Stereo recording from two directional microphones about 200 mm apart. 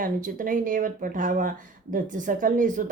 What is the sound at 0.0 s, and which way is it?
Speech, 45° right (ahead or behind).